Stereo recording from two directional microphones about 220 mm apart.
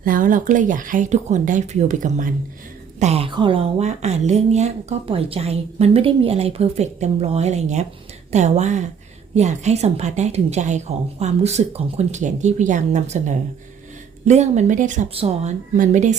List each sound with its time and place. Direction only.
0.0 s a woman's voice: 40° right (ahead or behind)